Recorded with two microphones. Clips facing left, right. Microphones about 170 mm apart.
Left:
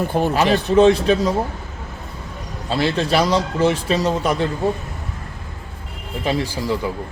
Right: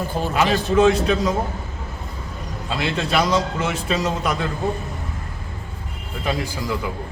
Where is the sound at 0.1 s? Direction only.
60° left (ahead or behind).